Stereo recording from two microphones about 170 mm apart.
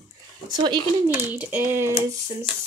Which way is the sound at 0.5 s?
25° right (ahead or behind).